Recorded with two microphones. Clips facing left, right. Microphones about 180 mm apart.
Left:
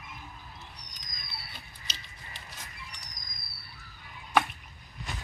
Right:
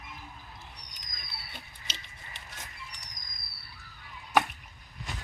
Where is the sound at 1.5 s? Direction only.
20° right (ahead or behind).